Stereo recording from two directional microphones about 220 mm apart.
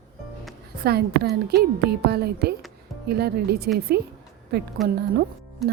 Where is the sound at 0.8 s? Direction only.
45° right (ahead or behind).